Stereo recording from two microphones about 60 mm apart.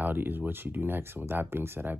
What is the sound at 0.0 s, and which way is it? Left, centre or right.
Speech, right.